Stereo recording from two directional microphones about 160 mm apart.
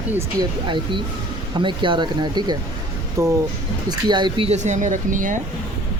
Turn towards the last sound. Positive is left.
turn(degrees=-55)  # may be behind; listen again after turning